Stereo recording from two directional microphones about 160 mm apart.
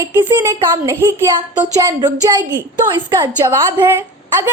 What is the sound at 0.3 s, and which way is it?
A woman's voice, 25° right (ahead or behind).